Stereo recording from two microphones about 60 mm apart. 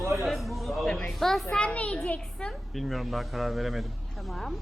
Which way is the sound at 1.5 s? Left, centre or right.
Left.